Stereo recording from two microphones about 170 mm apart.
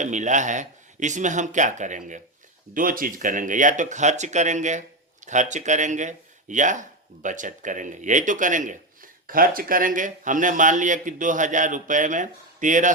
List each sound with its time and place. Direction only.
0.0 s speech: 45° right (ahead or behind)